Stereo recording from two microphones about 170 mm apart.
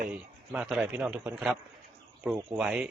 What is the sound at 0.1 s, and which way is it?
A man's voice, 5° right (ahead or behind).